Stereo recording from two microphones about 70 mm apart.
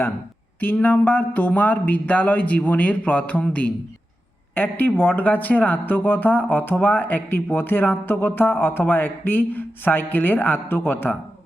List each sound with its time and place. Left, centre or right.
0.6 s speech: left